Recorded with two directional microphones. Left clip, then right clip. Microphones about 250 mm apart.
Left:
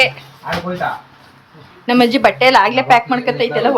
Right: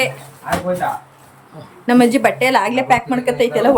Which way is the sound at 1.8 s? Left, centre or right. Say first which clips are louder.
Left 1 dB; centre.